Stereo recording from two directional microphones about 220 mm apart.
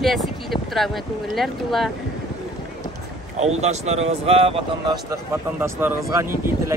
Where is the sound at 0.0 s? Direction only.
Centre (ahead or behind).